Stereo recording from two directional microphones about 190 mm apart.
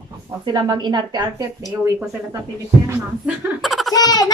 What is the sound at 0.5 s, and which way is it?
Speech, 20° right (ahead or behind).